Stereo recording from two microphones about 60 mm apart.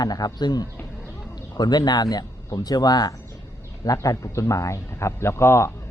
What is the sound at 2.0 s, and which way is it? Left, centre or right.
Speech, left.